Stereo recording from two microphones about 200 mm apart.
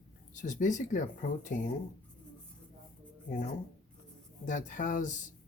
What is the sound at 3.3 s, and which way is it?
Speech, 40° left (ahead or behind).